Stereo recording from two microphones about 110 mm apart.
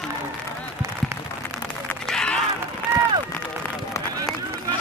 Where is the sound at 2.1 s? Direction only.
5° left (ahead or behind).